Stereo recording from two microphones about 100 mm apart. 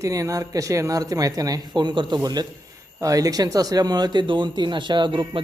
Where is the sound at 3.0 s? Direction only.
35° right (ahead or behind); by 5.4 s 55° right (ahead or behind).